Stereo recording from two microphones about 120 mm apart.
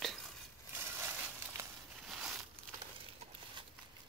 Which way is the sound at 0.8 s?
20° right (ahead or behind).